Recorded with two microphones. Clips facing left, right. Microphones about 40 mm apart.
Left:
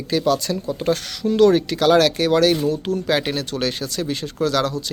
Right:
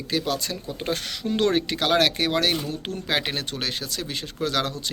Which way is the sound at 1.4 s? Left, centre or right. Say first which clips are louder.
Left 8 dB; right.